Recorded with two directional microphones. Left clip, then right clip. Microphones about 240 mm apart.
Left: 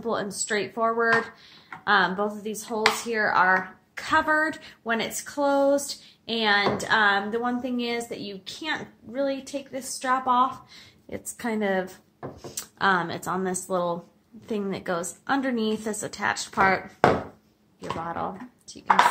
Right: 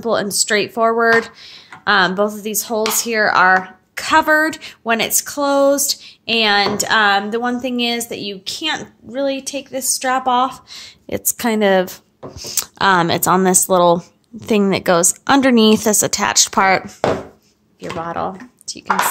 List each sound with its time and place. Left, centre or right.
0.0 s speech: right
17.9 s speech: right